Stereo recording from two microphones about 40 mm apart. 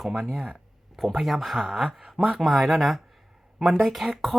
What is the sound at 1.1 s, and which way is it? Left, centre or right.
Speech, centre.